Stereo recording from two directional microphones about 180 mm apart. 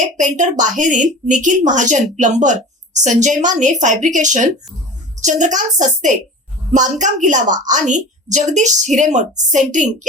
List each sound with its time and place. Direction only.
0.2 s a woman's voice: 45° right (ahead or behind)